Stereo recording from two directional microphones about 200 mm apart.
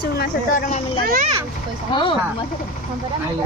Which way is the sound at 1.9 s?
25° left (ahead or behind).